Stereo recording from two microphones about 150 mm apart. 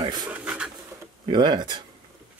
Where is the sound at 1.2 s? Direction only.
30° right (ahead or behind).